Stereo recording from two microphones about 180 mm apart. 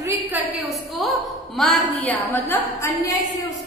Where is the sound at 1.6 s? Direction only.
5° left (ahead or behind).